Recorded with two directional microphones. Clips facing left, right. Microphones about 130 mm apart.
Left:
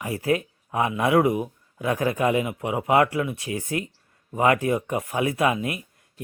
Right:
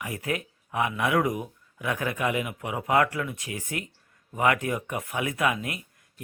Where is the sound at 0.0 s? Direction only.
30° left (ahead or behind).